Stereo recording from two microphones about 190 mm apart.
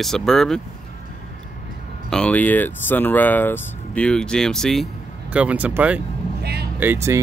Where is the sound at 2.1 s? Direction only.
5° left (ahead or behind).